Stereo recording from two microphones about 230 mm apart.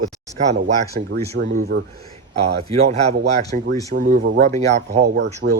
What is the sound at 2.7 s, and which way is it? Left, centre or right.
Speech, right.